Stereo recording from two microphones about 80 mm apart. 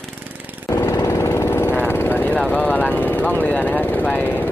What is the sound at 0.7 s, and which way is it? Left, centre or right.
Jackhammer, left.